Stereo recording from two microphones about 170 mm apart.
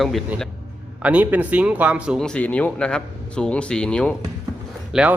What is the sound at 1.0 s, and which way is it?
Speech, 10° right (ahead or behind).